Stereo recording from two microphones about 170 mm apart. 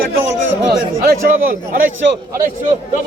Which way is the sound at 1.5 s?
55° right (ahead or behind).